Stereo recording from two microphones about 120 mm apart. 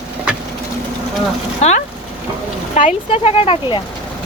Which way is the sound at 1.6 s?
70° left (ahead or behind).